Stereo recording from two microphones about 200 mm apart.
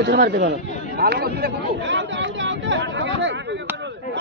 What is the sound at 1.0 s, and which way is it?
Speech, 55° right (ahead or behind).